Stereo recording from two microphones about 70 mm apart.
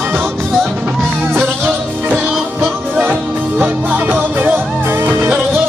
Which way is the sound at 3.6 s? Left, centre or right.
Right.